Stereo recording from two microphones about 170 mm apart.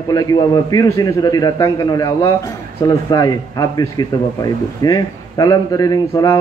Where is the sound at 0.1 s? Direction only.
25° left (ahead or behind).